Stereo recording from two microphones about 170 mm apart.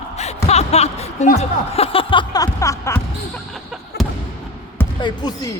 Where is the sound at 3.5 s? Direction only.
Centre (ahead or behind).